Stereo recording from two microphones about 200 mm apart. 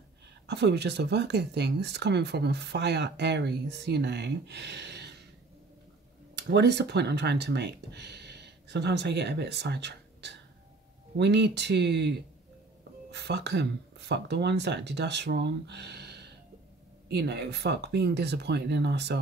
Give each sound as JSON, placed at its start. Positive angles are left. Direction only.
{"t": 0.5, "sound": "speech", "side_deg": -55}
{"t": 6.3, "sound": "speech", "side_deg": -55}